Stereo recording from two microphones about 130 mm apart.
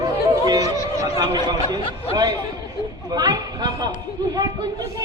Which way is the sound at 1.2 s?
35° right (ahead or behind).